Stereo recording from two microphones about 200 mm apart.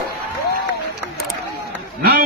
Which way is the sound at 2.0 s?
50° right (ahead or behind).